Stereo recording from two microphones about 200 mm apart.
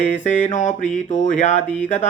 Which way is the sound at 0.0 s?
35° left (ahead or behind).